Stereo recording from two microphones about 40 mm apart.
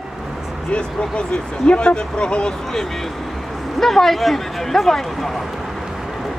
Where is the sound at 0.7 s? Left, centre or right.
Left.